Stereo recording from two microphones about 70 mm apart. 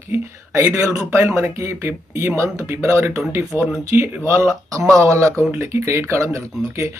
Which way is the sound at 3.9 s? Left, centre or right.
Right.